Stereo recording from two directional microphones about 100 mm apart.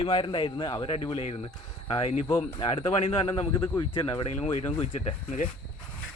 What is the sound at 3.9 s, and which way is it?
Speech, 55° left (ahead or behind).